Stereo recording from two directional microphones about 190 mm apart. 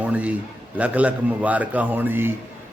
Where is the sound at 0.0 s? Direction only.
10° right (ahead or behind).